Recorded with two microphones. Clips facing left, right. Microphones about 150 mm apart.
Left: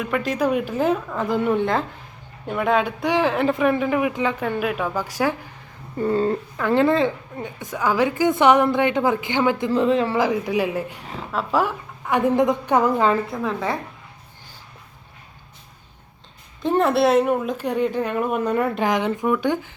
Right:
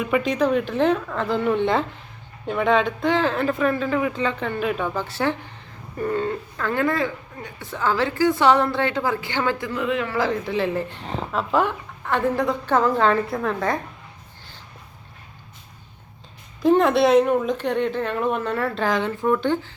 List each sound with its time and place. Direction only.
0.0 s speech: centre (ahead or behind)
6.0 s speech: 30° left (ahead or behind)
6.6 s a woman's voice: 20° left (ahead or behind)
10.2 s speech: 15° left (ahead or behind)
16.6 s speech: centre (ahead or behind)